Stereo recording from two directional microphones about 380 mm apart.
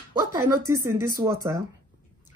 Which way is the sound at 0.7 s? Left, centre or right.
Centre.